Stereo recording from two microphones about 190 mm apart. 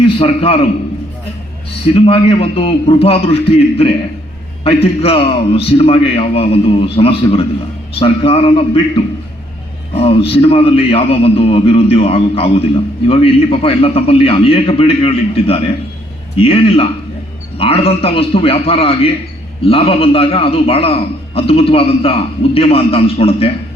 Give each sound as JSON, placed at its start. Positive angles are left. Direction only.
{"t": 0.2, "sound": "a man's voice", "side_deg": 30}
{"t": 1.9, "sound": "a man's voice", "side_deg": 30}